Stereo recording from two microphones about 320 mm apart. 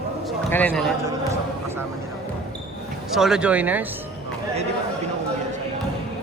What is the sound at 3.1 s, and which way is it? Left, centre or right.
Speech, centre.